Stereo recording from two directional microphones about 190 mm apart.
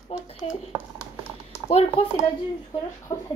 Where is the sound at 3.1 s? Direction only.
30° left (ahead or behind).